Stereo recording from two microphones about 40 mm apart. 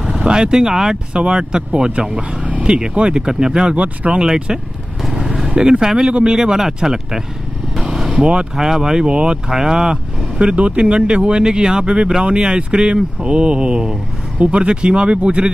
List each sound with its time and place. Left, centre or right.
0.0 s vehicle: right
1.1 s speech: right
3.7 s speech: right
4.5 s speech: centre
5.0 s vehicle: centre
5.7 s speech: centre
7.8 s vehicle: centre
8.2 s speech: right
8.5 s speech: centre